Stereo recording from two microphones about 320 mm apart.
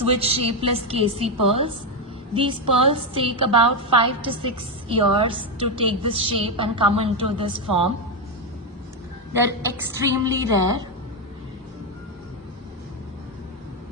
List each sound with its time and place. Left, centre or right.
0.2 s a woman's voice: centre
9.7 s a woman's voice: centre